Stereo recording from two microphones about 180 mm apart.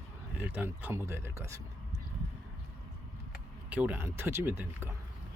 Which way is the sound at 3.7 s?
10° right (ahead or behind).